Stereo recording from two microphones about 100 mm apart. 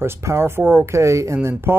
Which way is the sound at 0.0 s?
25° right (ahead or behind).